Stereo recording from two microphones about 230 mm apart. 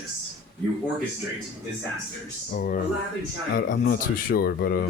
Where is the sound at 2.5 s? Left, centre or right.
Left.